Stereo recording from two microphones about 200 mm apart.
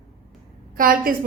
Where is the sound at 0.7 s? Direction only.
45° right (ahead or behind).